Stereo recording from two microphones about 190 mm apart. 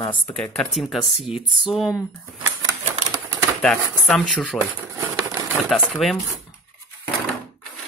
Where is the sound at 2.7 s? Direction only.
15° right (ahead or behind).